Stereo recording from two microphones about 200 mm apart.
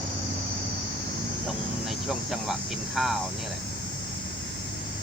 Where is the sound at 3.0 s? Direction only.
Centre (ahead or behind).